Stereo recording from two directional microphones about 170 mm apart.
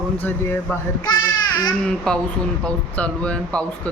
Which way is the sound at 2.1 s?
5° left (ahead or behind).